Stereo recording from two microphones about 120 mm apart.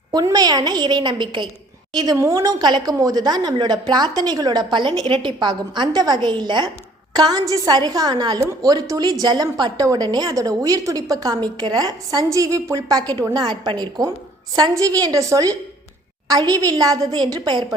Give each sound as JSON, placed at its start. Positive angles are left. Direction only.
{"t": 0.1, "sound": "a woman's voice", "side_deg": -35}
{"t": 2.1, "sound": "a woman's voice", "side_deg": -25}